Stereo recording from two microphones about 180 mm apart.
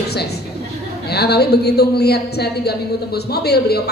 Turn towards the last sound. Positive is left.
turn(degrees=60)  # may be behind; listen again after turning